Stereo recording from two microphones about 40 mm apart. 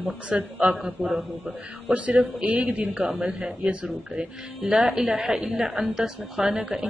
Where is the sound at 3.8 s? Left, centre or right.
Centre.